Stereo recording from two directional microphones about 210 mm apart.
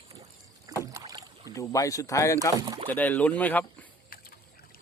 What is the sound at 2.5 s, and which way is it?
Speech, 20° right (ahead or behind).